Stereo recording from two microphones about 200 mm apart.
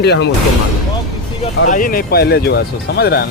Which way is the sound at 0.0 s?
60° left (ahead or behind).